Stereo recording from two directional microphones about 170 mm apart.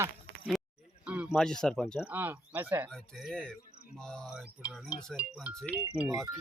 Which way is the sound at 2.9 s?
Centre (ahead or behind).